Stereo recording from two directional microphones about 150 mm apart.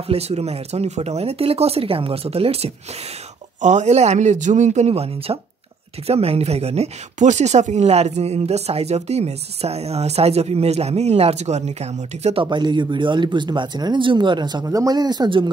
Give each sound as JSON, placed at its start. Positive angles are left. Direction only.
{"t": 0.1, "sound": "speech", "side_deg": -45}
{"t": 12.4, "sound": "speech", "side_deg": -30}